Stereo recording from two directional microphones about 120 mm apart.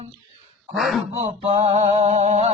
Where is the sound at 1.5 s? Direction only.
55° right (ahead or behind).